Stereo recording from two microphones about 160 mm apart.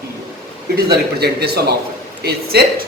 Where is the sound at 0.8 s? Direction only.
90° right.